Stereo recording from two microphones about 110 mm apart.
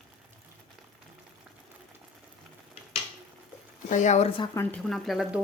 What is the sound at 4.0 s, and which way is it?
Speech, 90° left.